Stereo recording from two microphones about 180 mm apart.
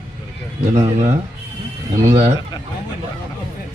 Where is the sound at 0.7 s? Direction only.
40° right (ahead or behind).